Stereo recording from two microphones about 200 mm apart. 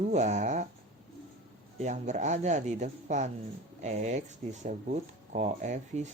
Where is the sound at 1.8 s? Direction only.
35° right (ahead or behind).